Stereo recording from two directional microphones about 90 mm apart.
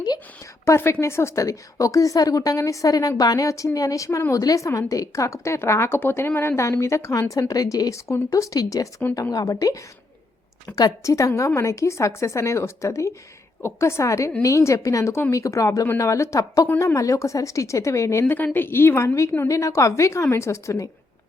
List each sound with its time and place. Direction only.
0.6 s a woman's voice: 30° left (ahead or behind)
18.3 s a woman's voice: 20° left (ahead or behind)